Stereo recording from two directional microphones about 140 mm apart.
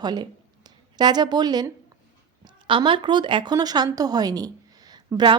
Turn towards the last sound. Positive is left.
turn(degrees=-30)  # may be behind; listen again after turning